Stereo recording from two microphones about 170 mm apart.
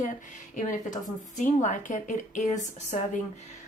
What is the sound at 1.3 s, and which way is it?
Speech, 45° left (ahead or behind).